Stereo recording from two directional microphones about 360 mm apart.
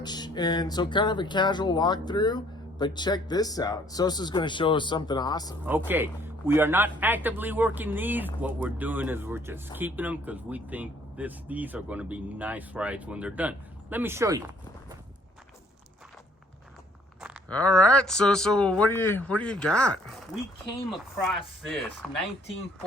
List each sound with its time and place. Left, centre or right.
0.0 s speech: centre
5.6 s speech: centre
17.2 s walk: centre
18.0 s speech: centre